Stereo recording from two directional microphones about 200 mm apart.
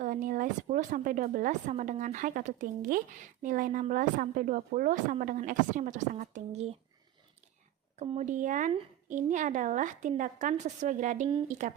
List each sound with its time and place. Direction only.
0.0 s a woman's voice: 40° right (ahead or behind)
7.9 s a woman's voice: 35° right (ahead or behind)